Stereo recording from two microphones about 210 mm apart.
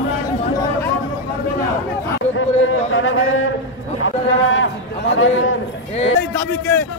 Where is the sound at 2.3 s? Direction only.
70° left (ahead or behind).